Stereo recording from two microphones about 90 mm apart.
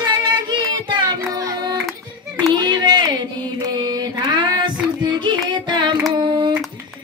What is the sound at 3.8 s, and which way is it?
Child singing, 50° right (ahead or behind).